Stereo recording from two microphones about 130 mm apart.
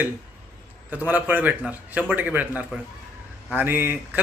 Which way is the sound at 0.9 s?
15° right (ahead or behind).